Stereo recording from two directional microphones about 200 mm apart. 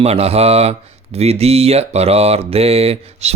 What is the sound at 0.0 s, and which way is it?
Speech, 30° right (ahead or behind).